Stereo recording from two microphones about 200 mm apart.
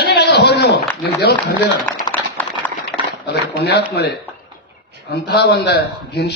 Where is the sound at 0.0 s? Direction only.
55° left (ahead or behind).